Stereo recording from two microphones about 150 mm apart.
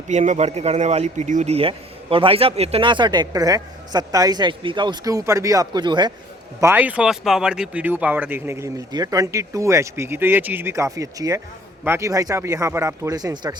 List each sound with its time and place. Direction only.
0.1 s a man's voice: 50° right (ahead or behind)
1.5 s a man's voice: 40° right (ahead or behind)
6.6 s a man's voice: 15° right (ahead or behind)